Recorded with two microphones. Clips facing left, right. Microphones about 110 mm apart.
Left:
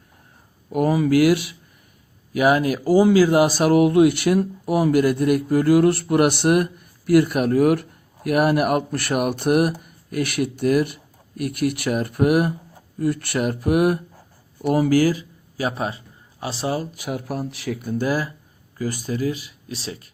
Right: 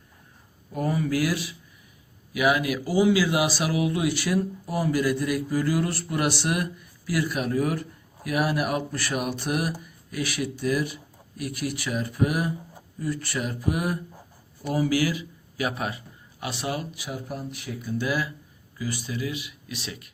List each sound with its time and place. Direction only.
0.7 s speech: 85° left; by 1.5 s 70° left (ahead or behind)
2.3 s speech: 40° left (ahead or behind); by 14.8 s 65° left (ahead or behind)
14.8 s speech: 40° left (ahead or behind)
16.9 s speech: 55° left (ahead or behind); by 17.7 s 80° left
17.8 s speech: 45° left (ahead or behind)